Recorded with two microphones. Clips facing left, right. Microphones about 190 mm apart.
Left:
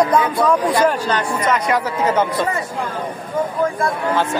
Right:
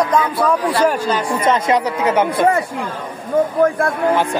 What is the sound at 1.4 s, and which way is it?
Speech, 20° right (ahead or behind).